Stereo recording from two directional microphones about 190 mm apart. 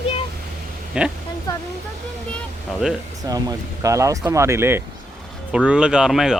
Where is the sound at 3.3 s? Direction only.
20° right (ahead or behind).